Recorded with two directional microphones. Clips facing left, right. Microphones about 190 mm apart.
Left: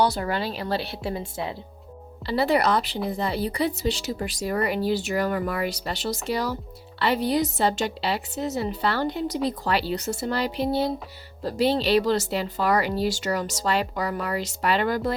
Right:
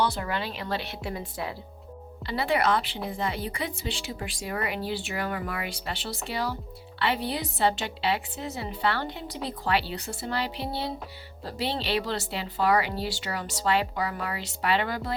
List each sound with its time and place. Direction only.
0.0 s speech: 40° left (ahead or behind)
2.2 s speech: 35° left (ahead or behind)